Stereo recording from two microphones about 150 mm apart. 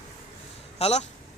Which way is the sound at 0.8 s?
45° left (ahead or behind).